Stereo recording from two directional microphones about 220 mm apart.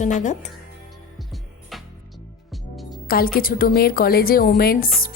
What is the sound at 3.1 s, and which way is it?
A woman's voice, 40° left (ahead or behind).